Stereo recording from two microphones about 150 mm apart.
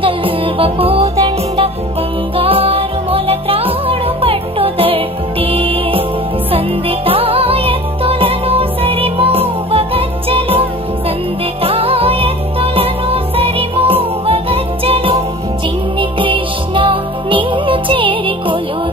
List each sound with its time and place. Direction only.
0.0 s music: 35° right (ahead or behind)